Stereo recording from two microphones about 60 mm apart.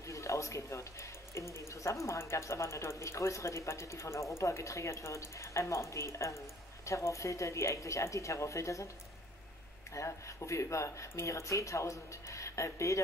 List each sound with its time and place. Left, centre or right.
0.0 s music: left
1.5 s speech: left
9.9 s speech: left